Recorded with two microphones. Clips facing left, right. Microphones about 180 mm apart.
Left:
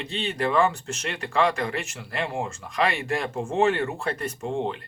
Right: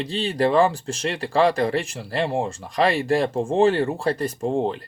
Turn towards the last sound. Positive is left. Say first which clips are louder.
# right 5 dB
turn(degrees=-35)  # may be behind; listen again after turning